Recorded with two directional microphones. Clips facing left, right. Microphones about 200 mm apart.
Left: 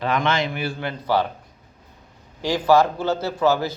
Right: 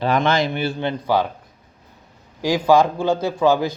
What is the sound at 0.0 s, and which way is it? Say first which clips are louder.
Speech: right 4 dB; 35° right (ahead or behind).